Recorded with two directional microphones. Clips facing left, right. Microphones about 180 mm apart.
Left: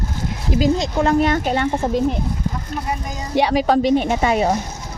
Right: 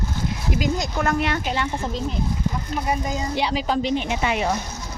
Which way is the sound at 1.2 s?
45° left (ahead or behind).